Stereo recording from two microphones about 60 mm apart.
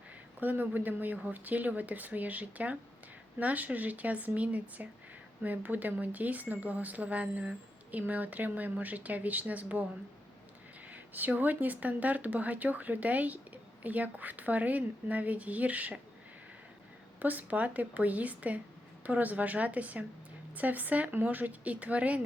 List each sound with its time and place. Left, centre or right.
0.3 s speech: right
10.9 s speech: right
17.2 s speech: right